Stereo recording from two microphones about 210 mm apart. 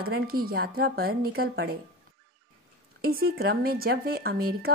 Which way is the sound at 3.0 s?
45° right (ahead or behind).